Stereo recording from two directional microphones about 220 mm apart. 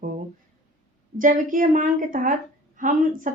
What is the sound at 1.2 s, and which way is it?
Speech, 35° right (ahead or behind).